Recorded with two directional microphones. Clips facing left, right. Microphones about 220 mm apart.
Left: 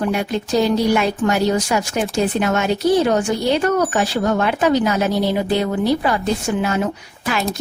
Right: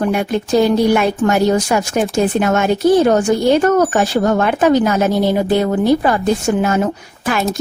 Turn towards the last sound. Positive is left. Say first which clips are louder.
# right 4 dB
turn(degrees=-45)  # may be behind; listen again after turning